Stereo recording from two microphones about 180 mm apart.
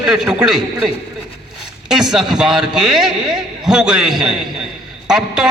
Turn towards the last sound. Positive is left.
turn(degrees=-5)  # may be behind; listen again after turning